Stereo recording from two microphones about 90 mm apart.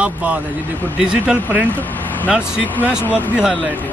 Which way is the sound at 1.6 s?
20° left (ahead or behind).